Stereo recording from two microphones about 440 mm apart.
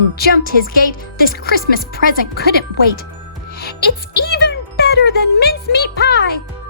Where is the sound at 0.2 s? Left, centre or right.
Left.